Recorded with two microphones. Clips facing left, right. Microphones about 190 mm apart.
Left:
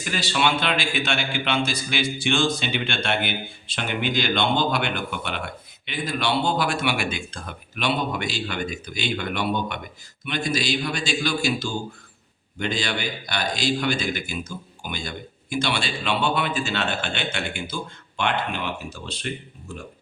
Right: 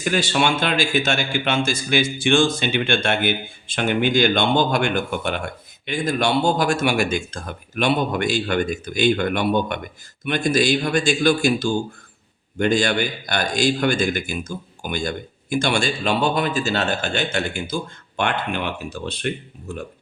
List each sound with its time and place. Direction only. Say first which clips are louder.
0.0 s a man's voice: right 4 dB; 50° right (ahead or behind)
18.2 s speech: right 2 dB; 55° right (ahead or behind)